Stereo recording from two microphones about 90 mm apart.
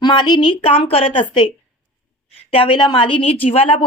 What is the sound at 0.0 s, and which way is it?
Speech, 55° left (ahead or behind).